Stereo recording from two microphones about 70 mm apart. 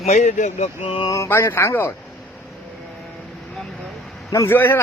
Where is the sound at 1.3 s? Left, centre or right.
Left.